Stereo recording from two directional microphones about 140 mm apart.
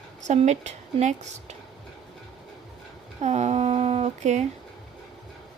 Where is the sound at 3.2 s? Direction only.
55° right (ahead or behind).